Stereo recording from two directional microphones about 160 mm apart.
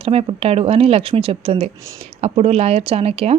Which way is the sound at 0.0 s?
40° right (ahead or behind).